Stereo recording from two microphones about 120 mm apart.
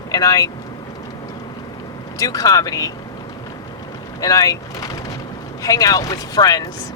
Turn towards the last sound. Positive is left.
turn(degrees=30)  # may be behind; listen again after turning